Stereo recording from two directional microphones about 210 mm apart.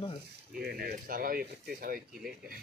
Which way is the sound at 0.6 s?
45° right (ahead or behind).